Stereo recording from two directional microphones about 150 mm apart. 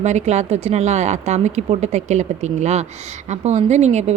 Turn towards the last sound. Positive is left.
turn(degrees=-50)  # may be behind; listen again after turning